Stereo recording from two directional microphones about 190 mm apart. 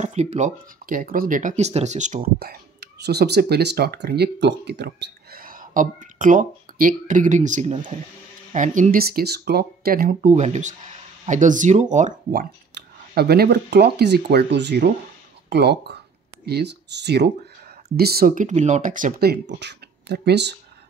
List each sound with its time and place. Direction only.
0.0 s speech: 35° right (ahead or behind)
2.4 s speech: 60° right (ahead or behind); by 12.1 s 40° right (ahead or behind)
12.3 s speech: 55° right (ahead or behind)